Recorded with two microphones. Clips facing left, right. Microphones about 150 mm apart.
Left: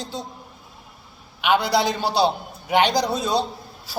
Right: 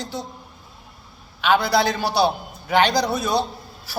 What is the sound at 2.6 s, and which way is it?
Speech, 15° left (ahead or behind).